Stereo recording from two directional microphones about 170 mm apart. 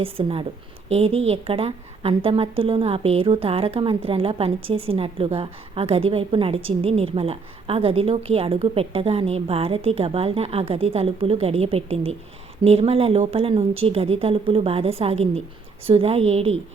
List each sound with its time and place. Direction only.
0.0 s a woman's voice: 30° right (ahead or behind)